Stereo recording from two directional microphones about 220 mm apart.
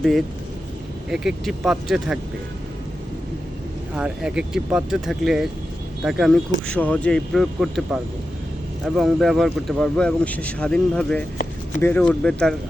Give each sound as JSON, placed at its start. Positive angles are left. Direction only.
{"t": 0.0, "sound": "speech", "side_deg": 0}
{"t": 3.9, "sound": "speech", "side_deg": -5}